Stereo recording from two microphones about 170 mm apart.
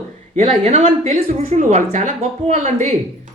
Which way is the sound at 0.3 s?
40° right (ahead or behind).